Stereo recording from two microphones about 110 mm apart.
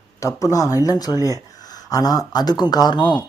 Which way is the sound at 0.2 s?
30° left (ahead or behind).